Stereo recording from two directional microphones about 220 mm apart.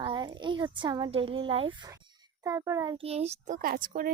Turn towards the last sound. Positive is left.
turn(degrees=-40)  # may be behind; listen again after turning